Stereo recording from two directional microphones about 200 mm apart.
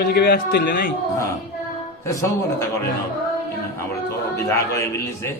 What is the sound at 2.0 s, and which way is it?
Speech, 15° left (ahead or behind).